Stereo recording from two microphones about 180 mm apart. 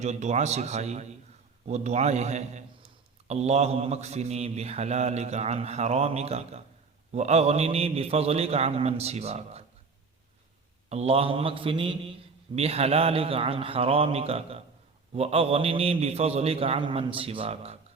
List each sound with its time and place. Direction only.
0.0 s a man's voice: 40° right (ahead or behind)
10.8 s a man's voice: 35° right (ahead or behind)